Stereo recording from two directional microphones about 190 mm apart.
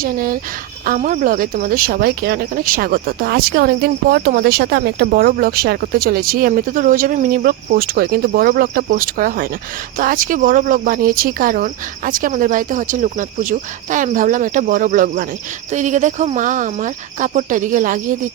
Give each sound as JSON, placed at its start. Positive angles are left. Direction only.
{"t": 0.0, "sound": "speech", "side_deg": -50}